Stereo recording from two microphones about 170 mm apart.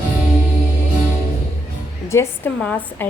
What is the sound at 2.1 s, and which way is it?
Music, 15° left (ahead or behind).